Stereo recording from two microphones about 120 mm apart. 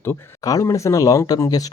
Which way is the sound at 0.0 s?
25° left (ahead or behind).